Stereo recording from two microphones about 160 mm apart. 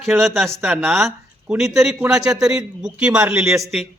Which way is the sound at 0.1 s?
15° right (ahead or behind).